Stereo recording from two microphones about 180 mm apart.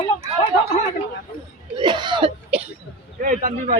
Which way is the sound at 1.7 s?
25° right (ahead or behind).